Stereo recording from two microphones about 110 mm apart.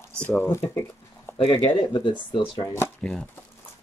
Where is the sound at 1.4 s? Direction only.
55° left (ahead or behind).